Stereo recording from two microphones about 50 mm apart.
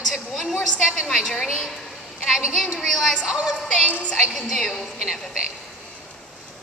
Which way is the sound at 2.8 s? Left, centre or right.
Centre.